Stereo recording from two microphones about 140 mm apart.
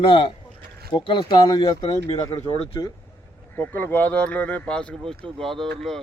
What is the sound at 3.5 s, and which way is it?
Speech, 15° left (ahead or behind).